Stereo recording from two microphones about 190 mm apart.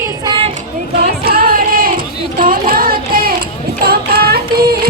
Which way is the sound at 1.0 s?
55° right (ahead or behind).